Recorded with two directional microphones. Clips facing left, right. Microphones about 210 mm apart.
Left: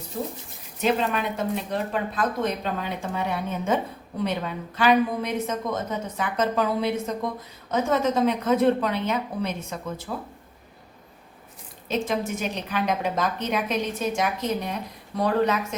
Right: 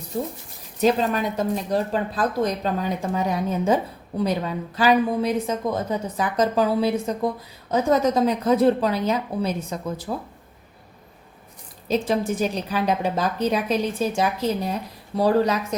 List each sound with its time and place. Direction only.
0.8 s speech: 40° right (ahead or behind)
4.8 s speech: 30° right (ahead or behind)
11.9 s speech: 35° right (ahead or behind)